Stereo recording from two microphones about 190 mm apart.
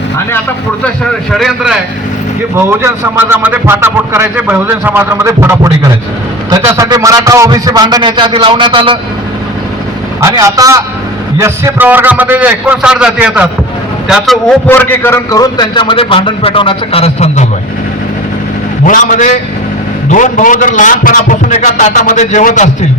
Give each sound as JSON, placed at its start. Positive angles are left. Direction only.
{"t": 1.3, "sound": "a man's voice", "side_deg": 0}
{"t": 2.6, "sound": "a man's voice", "side_deg": -10}
{"t": 10.2, "sound": "speech", "side_deg": -15}
{"t": 14.7, "sound": "a man's voice", "side_deg": 10}
{"t": 18.9, "sound": "a man's voice", "side_deg": 45}